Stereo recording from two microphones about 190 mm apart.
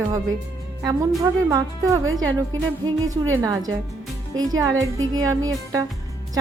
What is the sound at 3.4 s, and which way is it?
Speech, 20° right (ahead or behind).